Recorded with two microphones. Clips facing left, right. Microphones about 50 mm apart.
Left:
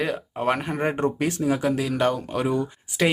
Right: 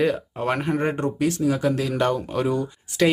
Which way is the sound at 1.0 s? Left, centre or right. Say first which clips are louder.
Right 1 dB; left.